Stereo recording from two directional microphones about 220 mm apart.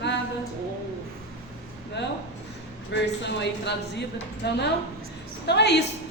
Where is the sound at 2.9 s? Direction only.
50° left (ahead or behind).